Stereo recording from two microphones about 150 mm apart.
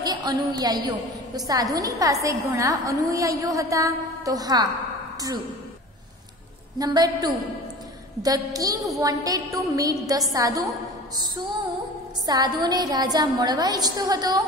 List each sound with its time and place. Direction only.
0.0 s a woman's voice: 25° right (ahead or behind)
6.8 s a woman's voice: 25° right (ahead or behind)
12.3 s a woman's voice: 25° right (ahead or behind)